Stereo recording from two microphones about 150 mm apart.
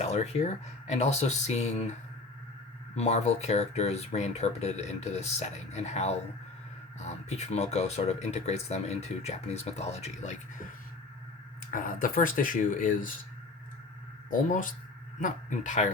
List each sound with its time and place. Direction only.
0.0 s speech: 45° left (ahead or behind)
11.7 s speech: 65° left (ahead or behind)
14.3 s speech: 65° left (ahead or behind)